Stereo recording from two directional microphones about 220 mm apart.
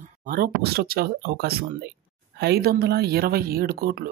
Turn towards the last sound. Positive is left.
turn(degrees=-45)  # may be behind; listen again after turning